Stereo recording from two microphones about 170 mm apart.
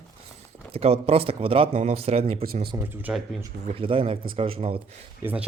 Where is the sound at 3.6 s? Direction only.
30° right (ahead or behind).